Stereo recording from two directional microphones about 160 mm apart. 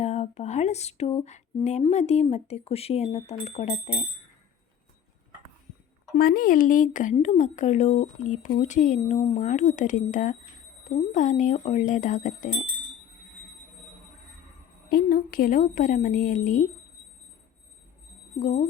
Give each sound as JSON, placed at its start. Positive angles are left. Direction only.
{"t": 0.0, "sound": "a sound", "side_deg": 45}
{"t": 1.8, "sound": "speech", "side_deg": 45}
{"t": 6.1, "sound": "speech", "side_deg": 65}
{"t": 14.8, "sound": "a woman's voice", "side_deg": 65}
{"t": 18.3, "sound": "speech", "side_deg": 55}